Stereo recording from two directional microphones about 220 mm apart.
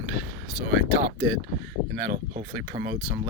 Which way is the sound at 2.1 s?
35° right (ahead or behind).